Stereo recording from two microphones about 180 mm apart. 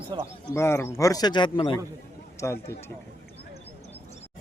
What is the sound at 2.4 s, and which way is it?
Speech, 15° left (ahead or behind).